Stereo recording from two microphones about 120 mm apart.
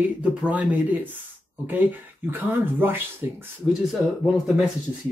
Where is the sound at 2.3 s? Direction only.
15° right (ahead or behind).